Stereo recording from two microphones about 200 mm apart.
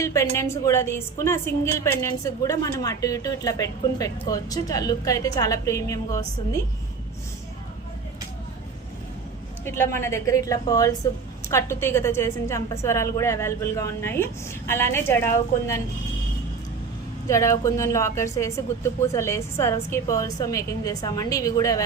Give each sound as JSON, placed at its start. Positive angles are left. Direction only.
{"t": 0.0, "sound": "a woman's voice", "side_deg": 15}
{"t": 9.6, "sound": "a woman's voice", "side_deg": 10}
{"t": 17.2, "sound": "a woman's voice", "side_deg": 15}